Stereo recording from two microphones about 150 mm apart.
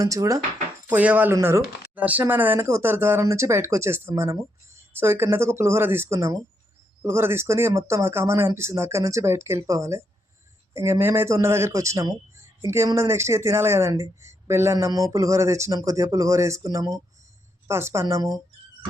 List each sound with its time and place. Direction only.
0.0 s speech: 20° right (ahead or behind)
0.9 s speech: 10° right (ahead or behind)